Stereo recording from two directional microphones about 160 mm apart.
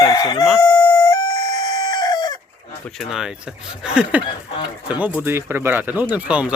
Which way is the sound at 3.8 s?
5° right (ahead or behind).